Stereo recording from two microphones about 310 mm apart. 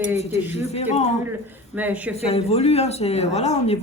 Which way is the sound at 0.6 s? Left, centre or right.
Left.